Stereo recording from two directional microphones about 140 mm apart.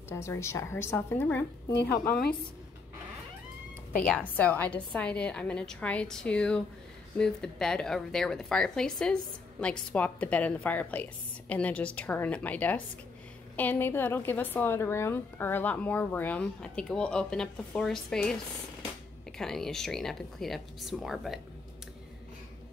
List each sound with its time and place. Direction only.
0.1 s a woman's voice: 20° left (ahead or behind)
3.9 s a woman's voice: 10° left (ahead or behind)